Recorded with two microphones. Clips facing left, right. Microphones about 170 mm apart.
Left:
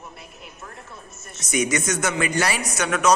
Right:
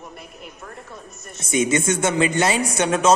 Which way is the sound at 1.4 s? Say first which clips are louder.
Right 3 dB; 25° right (ahead or behind).